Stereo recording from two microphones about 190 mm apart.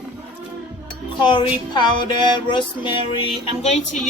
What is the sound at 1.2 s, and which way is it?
Music, 25° left (ahead or behind).